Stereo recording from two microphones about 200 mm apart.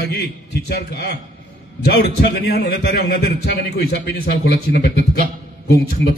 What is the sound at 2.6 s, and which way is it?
A man's voice, 55° left (ahead or behind).